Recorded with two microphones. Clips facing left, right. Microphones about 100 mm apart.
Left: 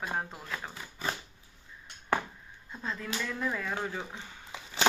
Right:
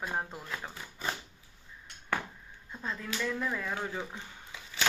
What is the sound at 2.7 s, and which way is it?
Speech, 5° right (ahead or behind).